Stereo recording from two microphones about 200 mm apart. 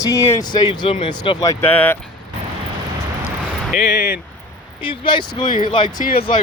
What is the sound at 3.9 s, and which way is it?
Speech, 50° left (ahead or behind).